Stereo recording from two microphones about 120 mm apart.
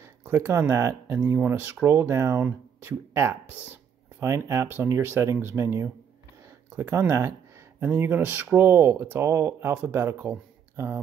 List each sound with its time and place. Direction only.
0.0 s speech: 25° right (ahead or behind)